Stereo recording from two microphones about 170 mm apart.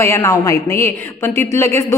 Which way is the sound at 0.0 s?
15° left (ahead or behind).